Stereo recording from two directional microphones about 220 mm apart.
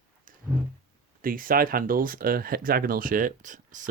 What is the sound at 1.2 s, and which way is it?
Speech, 40° right (ahead or behind).